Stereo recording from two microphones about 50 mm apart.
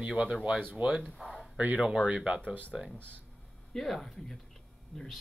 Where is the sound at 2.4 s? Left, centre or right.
Left.